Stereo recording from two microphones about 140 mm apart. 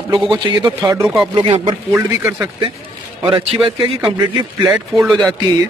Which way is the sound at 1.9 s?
20° right (ahead or behind).